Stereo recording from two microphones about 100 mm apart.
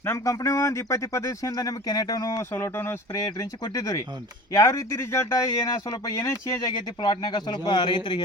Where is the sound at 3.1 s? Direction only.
35° left (ahead or behind).